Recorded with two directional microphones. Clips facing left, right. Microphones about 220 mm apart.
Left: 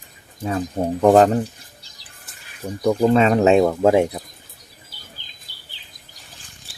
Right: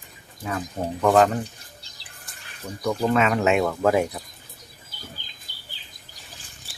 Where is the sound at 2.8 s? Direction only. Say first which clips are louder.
Left 6 dB; 20° left (ahead or behind).